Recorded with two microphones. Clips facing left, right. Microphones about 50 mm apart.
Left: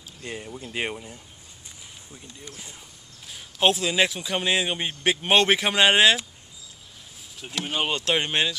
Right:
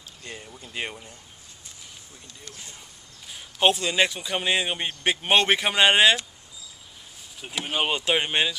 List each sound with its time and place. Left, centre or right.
0.2 s speech: centre
2.2 s speech: centre
3.3 s a man's voice: centre
7.3 s a man's voice: centre